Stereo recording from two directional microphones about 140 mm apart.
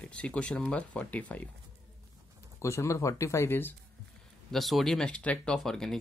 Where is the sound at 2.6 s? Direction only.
20° left (ahead or behind).